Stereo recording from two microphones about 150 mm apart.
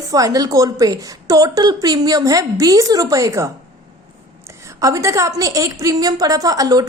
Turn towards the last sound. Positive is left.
turn(degrees=-25)  # may be behind; listen again after turning